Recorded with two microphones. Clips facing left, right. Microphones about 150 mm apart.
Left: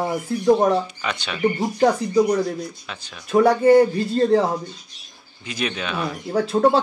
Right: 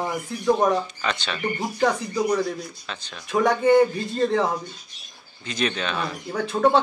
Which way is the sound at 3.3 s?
35° left (ahead or behind).